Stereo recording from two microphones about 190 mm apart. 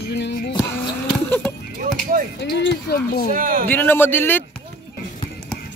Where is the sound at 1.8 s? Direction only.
45° right (ahead or behind).